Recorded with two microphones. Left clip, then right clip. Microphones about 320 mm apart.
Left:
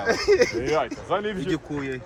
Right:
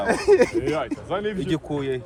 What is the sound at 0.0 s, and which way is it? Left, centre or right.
Speech, right.